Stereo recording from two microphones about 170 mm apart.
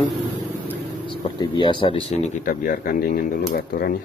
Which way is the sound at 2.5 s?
55° left (ahead or behind).